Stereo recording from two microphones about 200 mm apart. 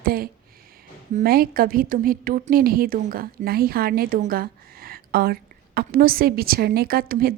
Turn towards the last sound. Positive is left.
turn(degrees=-50)  # may be behind; listen again after turning